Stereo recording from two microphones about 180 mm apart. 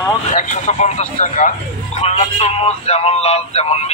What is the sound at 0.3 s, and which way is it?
Speech, 40° left (ahead or behind).